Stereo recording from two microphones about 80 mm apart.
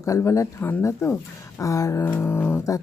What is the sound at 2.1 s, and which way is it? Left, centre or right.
Music, left.